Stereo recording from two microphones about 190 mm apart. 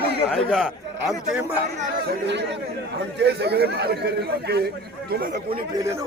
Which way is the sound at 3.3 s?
60° right (ahead or behind).